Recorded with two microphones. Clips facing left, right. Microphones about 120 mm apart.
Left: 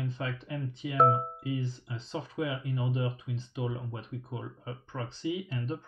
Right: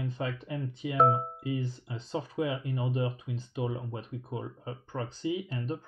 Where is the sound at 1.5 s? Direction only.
45° right (ahead or behind).